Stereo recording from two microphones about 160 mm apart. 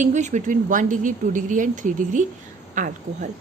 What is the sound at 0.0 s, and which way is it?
A woman's voice, 50° right (ahead or behind).